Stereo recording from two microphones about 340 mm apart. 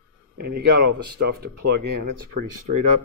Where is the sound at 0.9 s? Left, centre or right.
Right.